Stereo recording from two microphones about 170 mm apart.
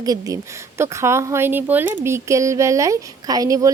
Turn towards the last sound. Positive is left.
turn(degrees=-20)  # may be behind; listen again after turning